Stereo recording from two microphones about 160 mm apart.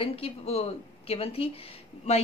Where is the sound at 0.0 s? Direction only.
40° left (ahead or behind).